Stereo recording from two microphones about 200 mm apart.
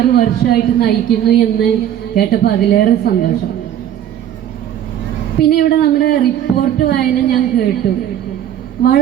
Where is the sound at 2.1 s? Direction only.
50° left (ahead or behind).